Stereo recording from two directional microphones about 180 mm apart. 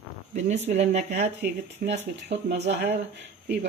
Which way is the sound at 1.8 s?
60° right (ahead or behind).